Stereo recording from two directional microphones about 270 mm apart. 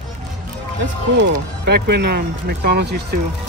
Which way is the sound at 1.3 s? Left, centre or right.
Right.